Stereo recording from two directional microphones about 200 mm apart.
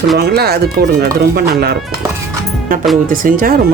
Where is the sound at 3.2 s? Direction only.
45° right (ahead or behind).